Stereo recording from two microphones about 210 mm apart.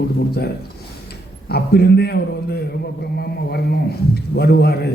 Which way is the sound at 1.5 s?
50° left (ahead or behind).